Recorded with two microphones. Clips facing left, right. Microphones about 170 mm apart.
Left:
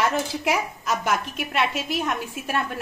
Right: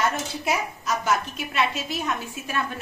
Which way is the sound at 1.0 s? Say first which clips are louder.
Even; 65° left (ahead or behind).